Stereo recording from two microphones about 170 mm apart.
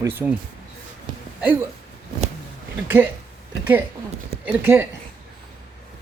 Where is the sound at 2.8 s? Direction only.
10° right (ahead or behind).